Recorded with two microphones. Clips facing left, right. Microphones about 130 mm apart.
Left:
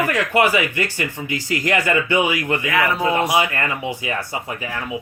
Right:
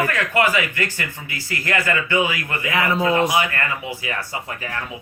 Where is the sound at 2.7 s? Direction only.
25° right (ahead or behind).